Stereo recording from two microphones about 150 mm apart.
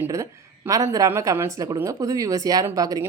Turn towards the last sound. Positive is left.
turn(degrees=-25)  # may be behind; listen again after turning